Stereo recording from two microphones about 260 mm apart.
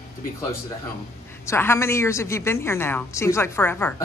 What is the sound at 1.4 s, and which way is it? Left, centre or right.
Speech, centre.